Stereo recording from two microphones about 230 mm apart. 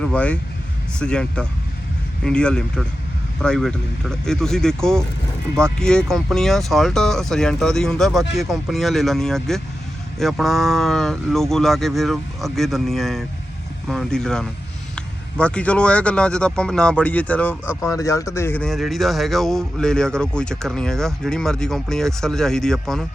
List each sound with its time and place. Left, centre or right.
0.0 s speech: centre